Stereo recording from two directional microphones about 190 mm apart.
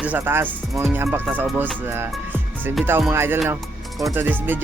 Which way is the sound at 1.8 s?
15° right (ahead or behind).